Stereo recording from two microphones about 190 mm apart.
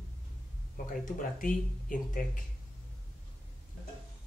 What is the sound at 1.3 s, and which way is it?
Speech, 45° left (ahead or behind).